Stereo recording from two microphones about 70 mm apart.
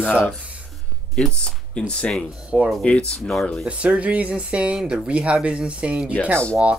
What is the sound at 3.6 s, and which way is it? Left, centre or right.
Speech, centre.